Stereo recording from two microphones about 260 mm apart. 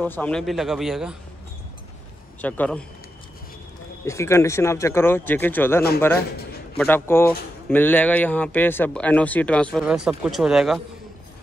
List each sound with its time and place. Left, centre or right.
0.0 s speech: centre
2.4 s speech: centre
4.0 s a man's voice: centre